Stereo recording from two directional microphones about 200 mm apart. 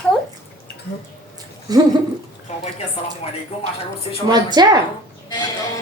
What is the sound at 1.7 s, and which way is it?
Speech, 20° right (ahead or behind).